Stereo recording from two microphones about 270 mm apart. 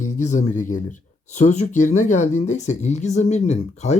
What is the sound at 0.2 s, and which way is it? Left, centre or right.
Speech, left.